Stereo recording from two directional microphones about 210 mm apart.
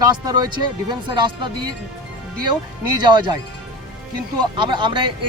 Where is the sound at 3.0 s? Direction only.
20° right (ahead or behind).